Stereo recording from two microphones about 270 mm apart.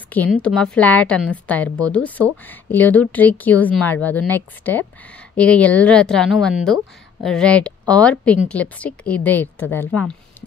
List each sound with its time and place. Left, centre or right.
0.1 s a woman's voice: centre